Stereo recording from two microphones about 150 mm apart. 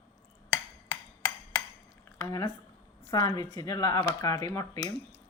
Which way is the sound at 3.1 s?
25° left (ahead or behind).